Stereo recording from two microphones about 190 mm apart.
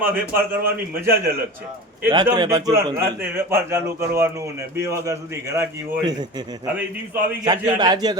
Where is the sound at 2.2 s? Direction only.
20° right (ahead or behind).